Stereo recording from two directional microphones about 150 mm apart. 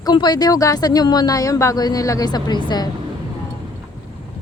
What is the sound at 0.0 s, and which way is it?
Speech, 30° left (ahead or behind).